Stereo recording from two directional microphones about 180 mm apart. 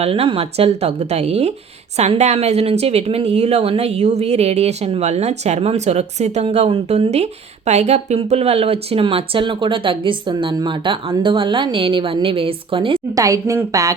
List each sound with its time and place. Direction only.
0.0 s a woman's voice: 35° right (ahead or behind)